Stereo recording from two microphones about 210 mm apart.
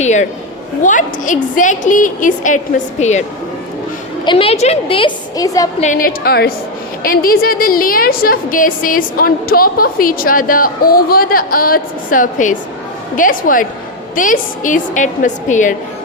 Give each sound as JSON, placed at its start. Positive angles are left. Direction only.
{"t": 0.0, "sound": "a woman's voice", "side_deg": 35}
{"t": 4.3, "sound": "a woman's voice", "side_deg": 25}
{"t": 5.8, "sound": "a woman's voice", "side_deg": 40}